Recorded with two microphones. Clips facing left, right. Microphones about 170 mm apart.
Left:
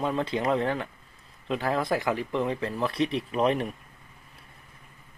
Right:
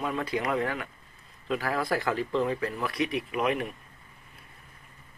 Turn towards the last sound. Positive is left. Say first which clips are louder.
# left 3 dB
turn(degrees=30)  # may be behind; listen again after turning